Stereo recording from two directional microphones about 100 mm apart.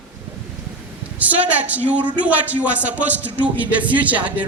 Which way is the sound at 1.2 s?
15° right (ahead or behind).